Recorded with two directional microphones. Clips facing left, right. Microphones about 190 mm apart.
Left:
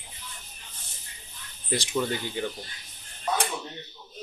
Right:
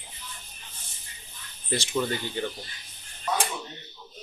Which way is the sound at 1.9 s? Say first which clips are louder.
Even; centre (ahead or behind).